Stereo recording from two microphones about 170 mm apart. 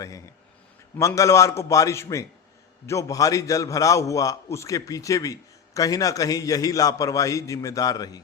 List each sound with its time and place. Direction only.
0.9 s a man's voice: 20° left (ahead or behind)